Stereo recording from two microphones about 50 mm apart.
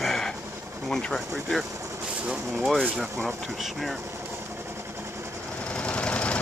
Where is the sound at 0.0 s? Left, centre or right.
Centre.